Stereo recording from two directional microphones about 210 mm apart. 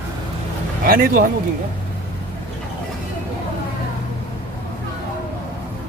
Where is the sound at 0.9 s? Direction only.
45° right (ahead or behind).